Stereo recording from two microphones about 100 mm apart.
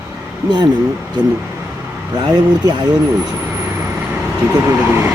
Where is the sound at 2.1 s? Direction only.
50° right (ahead or behind).